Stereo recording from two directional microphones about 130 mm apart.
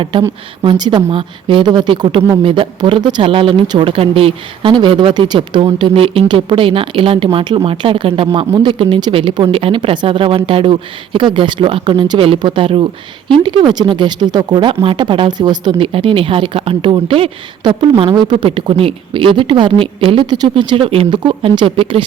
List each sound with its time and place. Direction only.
0.0 s speech: 40° right (ahead or behind)